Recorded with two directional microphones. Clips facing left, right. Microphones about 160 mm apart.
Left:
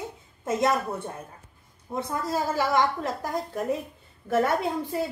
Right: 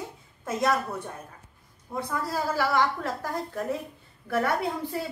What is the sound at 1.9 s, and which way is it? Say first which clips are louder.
A woman's voice: left 2 dB; 20° left (ahead or behind).